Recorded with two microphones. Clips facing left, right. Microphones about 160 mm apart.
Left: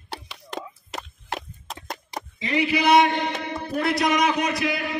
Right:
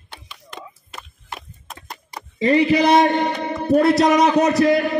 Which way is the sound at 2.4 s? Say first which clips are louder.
Right 7 dB; 40° right (ahead or behind).